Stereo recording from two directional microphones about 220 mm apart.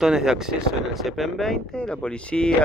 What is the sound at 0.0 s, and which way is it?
Speech, centre (ahead or behind).